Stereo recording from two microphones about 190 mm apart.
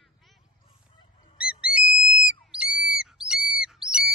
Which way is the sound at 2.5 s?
5° right (ahead or behind).